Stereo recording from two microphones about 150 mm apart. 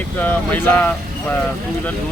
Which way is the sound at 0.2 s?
10° left (ahead or behind).